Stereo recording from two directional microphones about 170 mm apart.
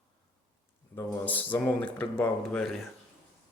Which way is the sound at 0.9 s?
10° left (ahead or behind).